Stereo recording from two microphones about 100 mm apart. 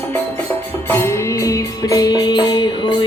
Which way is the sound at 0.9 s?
30° left (ahead or behind).